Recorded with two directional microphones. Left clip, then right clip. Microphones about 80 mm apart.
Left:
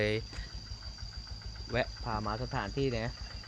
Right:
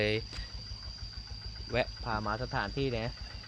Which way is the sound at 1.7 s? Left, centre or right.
Centre.